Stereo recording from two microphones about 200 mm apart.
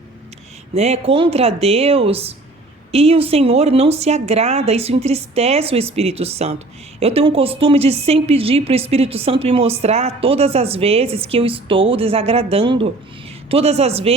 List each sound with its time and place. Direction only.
0.7 s a woman's voice: 30° right (ahead or behind)